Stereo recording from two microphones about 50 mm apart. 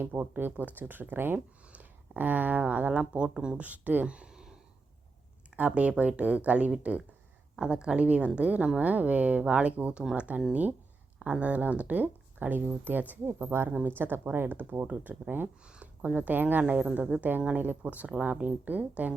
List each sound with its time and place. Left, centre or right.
0.0 s speech: right; by 3.6 s centre
3.6 s speech: right
4.1 s a sound: centre
5.5 s a woman's voice: right
13.7 s speech: right
15.6 s a sound: centre
16.1 s speech: right